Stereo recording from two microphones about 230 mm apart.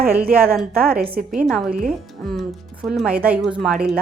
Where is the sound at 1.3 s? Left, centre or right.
Centre.